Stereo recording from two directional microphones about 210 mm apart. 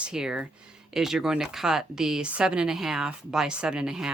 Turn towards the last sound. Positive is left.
turn(degrees=-5)  # may be behind; listen again after turning